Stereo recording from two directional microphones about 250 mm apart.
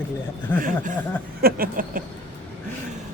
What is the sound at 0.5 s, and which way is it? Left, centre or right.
Speech, centre.